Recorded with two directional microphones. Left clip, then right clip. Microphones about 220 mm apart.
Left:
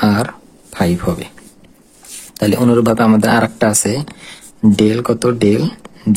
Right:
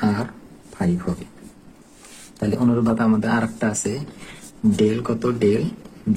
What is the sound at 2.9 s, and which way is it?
Speech, 50° left (ahead or behind).